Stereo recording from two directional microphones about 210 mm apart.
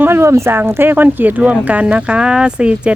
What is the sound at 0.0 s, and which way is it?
Speech, 10° right (ahead or behind).